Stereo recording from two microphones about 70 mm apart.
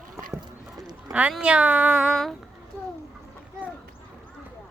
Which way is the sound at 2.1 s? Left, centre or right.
Centre.